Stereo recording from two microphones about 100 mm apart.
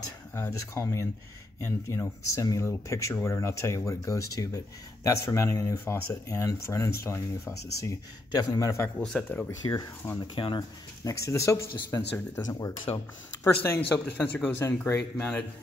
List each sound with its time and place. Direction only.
0.3 s speech: 30° left (ahead or behind)
8.8 s speech: 10° left (ahead or behind)
10.1 s speech: 50° left (ahead or behind)
11.1 s speech: 30° left (ahead or behind)
13.4 s speech: 25° left (ahead or behind)
13.7 s speech: 15° left (ahead or behind)